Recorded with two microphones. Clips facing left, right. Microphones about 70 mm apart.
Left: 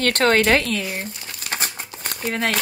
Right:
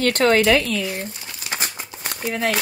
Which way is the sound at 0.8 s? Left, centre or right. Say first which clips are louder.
Right 1 dB; left.